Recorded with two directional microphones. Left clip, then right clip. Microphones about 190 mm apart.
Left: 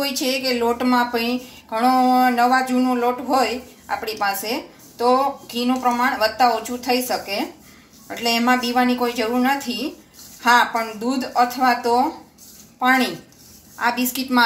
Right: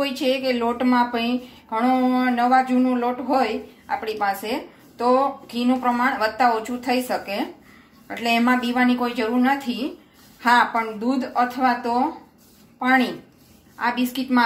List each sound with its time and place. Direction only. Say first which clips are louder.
0.0 s a woman's voice: even; 15° right (ahead or behind)